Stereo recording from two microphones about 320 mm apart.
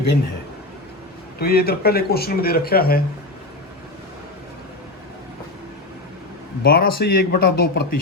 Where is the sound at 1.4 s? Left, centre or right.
Left.